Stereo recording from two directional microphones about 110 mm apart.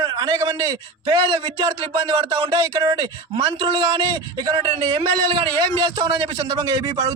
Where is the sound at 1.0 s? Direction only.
45° right (ahead or behind).